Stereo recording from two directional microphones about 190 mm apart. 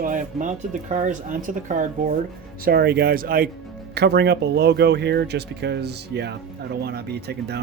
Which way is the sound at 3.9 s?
60° right (ahead or behind).